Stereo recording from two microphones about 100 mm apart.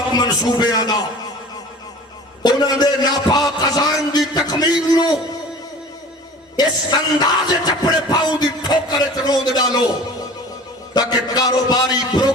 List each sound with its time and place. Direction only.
0.1 s music: 45° left (ahead or behind)
2.4 s music: 45° left (ahead or behind)
3.6 s a man's voice: 40° left (ahead or behind)
6.6 s music: 45° left (ahead or behind)
10.9 s a man's voice: 40° left (ahead or behind)